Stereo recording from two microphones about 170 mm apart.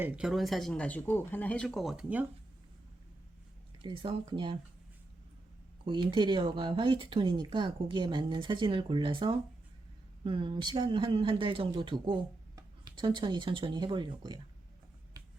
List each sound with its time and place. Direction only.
0.0 s speech: 5° right (ahead or behind)
3.8 s speech: 30° right (ahead or behind)
5.8 s speech: 30° right (ahead or behind)